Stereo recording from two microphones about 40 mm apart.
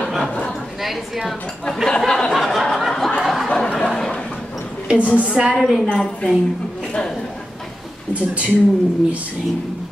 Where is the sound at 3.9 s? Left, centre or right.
Centre.